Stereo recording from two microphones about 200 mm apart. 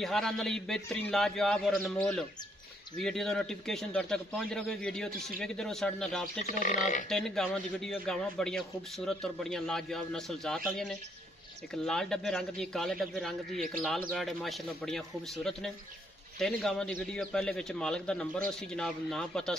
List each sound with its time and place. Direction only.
0.0 s a man's voice: centre (ahead or behind)
6.6 s speech: 40° left (ahead or behind)
7.1 s a man's voice: centre (ahead or behind)